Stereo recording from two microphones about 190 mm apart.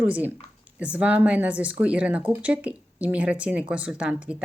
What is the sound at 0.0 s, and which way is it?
Speech, 10° right (ahead or behind).